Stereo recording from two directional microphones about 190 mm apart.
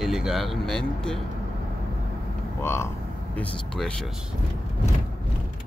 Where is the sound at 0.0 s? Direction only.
Centre (ahead or behind).